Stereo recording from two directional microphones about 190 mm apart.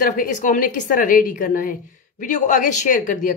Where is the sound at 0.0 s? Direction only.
45° left (ahead or behind).